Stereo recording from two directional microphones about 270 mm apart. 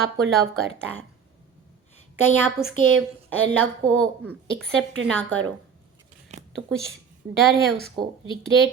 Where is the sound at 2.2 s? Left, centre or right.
Centre.